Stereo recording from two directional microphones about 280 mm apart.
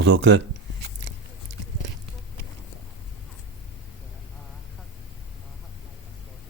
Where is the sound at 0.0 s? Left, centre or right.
Right.